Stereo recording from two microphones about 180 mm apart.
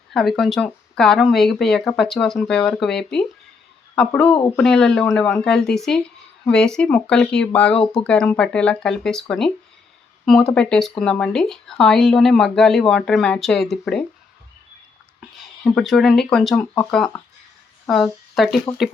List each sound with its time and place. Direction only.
0.1 s speech: centre (ahead or behind)
10.2 s speech: 5° left (ahead or behind)
15.2 s speech: centre (ahead or behind)
17.8 s speech: centre (ahead or behind)